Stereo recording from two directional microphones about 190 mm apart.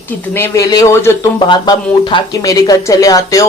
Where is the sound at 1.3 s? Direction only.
25° left (ahead or behind).